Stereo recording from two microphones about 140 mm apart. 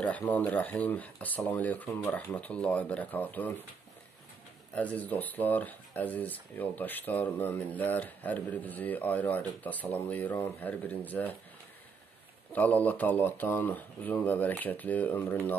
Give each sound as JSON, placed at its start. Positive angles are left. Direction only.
{"t": 0.0, "sound": "speech", "side_deg": 10}
{"t": 4.7, "sound": "speech", "side_deg": 10}
{"t": 12.5, "sound": "speech", "side_deg": 10}